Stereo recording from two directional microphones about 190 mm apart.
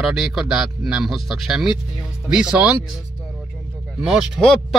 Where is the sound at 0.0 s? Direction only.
Centre (ahead or behind).